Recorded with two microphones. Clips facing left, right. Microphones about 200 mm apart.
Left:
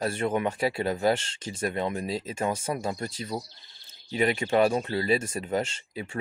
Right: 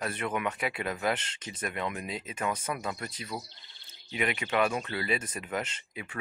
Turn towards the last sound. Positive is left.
turn(degrees=25)  # may be behind; listen again after turning